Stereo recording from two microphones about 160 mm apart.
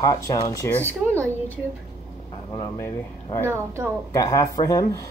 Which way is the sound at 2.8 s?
15° left (ahead or behind).